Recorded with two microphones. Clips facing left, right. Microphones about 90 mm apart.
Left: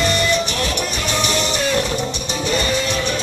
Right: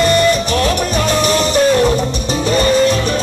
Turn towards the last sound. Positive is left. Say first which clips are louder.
# right 8 dB
turn(degrees=-40)  # may be behind; listen again after turning